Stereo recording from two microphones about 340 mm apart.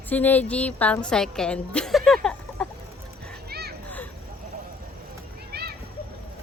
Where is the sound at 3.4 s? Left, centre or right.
Right.